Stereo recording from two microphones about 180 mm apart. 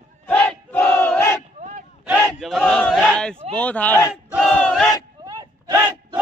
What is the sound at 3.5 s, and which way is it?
Speech, 10° left (ahead or behind).